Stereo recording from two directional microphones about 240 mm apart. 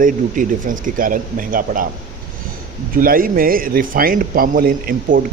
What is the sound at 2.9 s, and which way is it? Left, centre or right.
Speech, right.